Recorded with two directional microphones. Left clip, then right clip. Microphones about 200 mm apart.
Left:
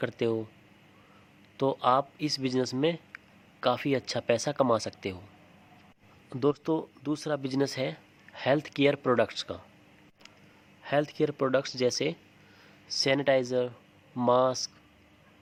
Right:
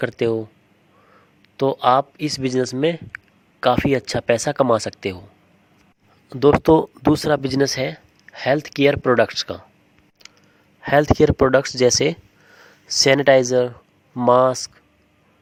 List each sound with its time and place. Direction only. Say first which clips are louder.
0.0 s speech: right 9 dB; 30° right (ahead or behind)
1.5 s speech: right 9 dB; 30° right (ahead or behind)
6.6 s speech: right 16 dB; 45° right (ahead or behind)
10.8 s speech: right 13 dB; 40° right (ahead or behind)